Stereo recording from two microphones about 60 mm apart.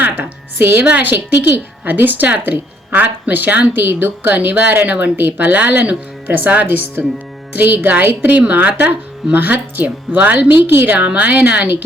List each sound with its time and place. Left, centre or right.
0.0 s music: right
0.9 s a woman's voice: right